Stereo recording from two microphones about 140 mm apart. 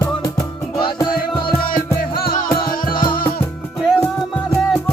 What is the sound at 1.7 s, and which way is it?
Music, 90° left.